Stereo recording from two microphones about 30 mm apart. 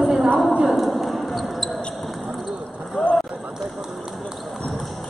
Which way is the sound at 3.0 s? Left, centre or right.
Left.